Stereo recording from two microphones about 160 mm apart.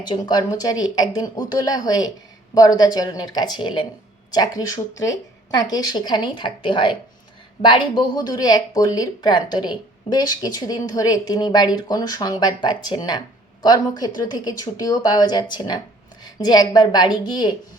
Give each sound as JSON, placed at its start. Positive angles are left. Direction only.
{"t": 0.0, "sound": "speech", "side_deg": 25}